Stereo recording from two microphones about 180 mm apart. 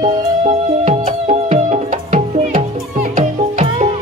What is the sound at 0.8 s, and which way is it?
Music, 35° right (ahead or behind).